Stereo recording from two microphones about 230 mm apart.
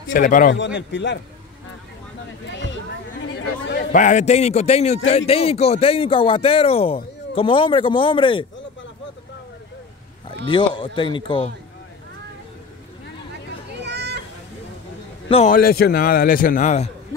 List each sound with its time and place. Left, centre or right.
0.1 s a man's voice: left
0.7 s a man's voice: left
3.2 s chatter: left
3.9 s a man's voice: left
10.2 s a man's voice: left
13.8 s a sound: right
15.2 s a man's voice: left
15.5 s a man's voice: left